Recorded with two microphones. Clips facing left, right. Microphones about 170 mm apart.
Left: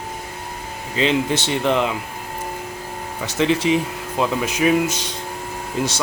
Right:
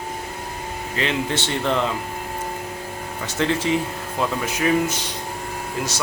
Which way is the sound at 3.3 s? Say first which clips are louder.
Left 3 dB; 15° left (ahead or behind).